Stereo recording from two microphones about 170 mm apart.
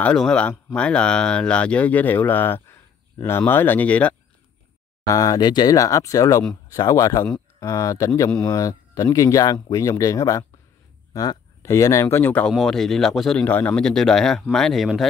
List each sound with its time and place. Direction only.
0.0 s speech: 5° left (ahead or behind)
5.0 s speech: 20° left (ahead or behind); by 15.0 s centre (ahead or behind)